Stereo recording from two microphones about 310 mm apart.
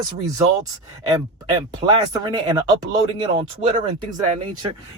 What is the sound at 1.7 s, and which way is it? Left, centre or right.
Speech, centre.